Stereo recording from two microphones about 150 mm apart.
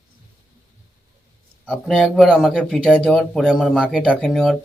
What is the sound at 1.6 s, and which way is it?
Speech, centre (ahead or behind).